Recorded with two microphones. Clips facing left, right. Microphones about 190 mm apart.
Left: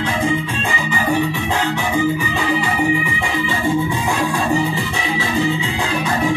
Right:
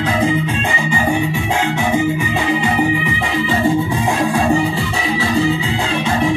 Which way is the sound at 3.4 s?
30° right (ahead or behind).